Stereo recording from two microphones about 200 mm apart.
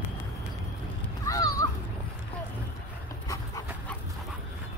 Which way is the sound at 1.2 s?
15° left (ahead or behind).